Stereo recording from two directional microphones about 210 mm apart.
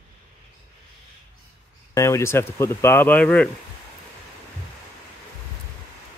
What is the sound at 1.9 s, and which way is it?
Speech, 15° left (ahead or behind).